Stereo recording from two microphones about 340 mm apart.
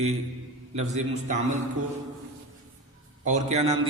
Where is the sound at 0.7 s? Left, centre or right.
Centre.